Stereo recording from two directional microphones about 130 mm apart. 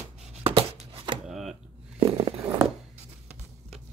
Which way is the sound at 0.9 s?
40° right (ahead or behind).